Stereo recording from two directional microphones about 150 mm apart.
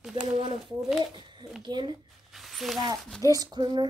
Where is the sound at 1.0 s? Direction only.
35° right (ahead or behind).